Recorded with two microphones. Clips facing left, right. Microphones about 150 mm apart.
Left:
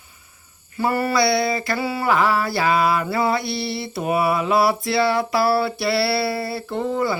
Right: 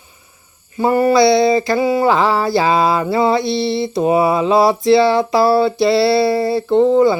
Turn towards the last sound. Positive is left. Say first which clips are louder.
# right 11 dB
turn(degrees=-25)  # may be behind; listen again after turning